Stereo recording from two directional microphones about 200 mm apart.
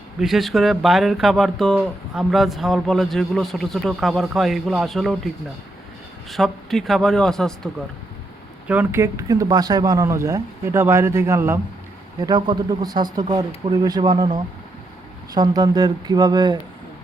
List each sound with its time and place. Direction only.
0.2 s speech: centre (ahead or behind)
6.3 s speech: centre (ahead or behind)
8.6 s speech: 10° right (ahead or behind)